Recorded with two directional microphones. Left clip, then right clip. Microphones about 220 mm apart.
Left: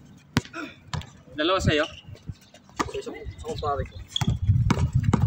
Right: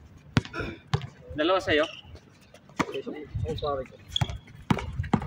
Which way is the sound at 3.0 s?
45° left (ahead or behind).